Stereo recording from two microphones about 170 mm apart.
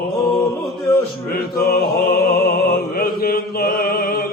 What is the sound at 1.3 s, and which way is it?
Music, 65° left (ahead or behind).